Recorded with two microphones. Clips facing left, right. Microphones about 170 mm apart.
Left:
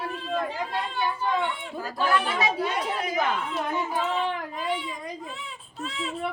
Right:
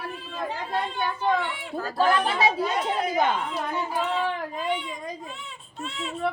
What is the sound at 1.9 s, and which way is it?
Speech, 30° right (ahead or behind).